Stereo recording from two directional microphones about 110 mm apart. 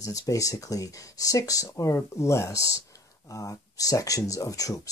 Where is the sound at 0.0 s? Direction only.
30° left (ahead or behind).